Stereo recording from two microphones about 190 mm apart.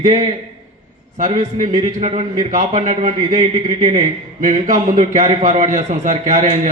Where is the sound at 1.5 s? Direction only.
40° right (ahead or behind).